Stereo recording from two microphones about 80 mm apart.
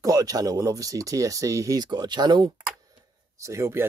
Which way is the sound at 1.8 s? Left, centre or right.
Right.